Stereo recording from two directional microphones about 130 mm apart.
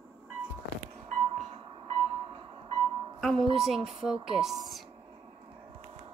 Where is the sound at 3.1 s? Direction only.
5° left (ahead or behind).